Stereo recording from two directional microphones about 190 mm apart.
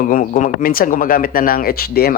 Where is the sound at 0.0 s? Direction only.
45° left (ahead or behind).